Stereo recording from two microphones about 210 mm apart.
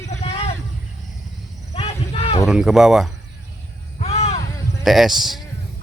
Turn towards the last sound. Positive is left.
turn(degrees=0)  # may be behind; listen again after turning